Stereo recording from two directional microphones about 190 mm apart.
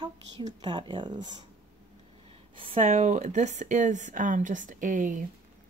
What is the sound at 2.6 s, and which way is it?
Speech, 30° right (ahead or behind).